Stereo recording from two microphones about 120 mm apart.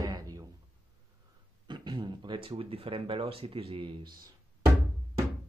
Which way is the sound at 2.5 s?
50° right (ahead or behind).